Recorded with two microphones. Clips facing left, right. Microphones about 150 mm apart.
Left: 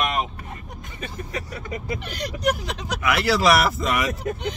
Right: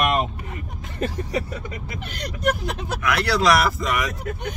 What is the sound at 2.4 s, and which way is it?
Speech, 55° right (ahead or behind).